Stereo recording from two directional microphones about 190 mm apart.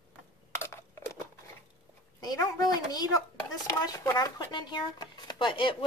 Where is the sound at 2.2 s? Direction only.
20° left (ahead or behind).